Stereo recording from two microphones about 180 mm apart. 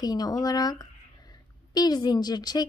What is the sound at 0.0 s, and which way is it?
A woman's voice, 20° left (ahead or behind).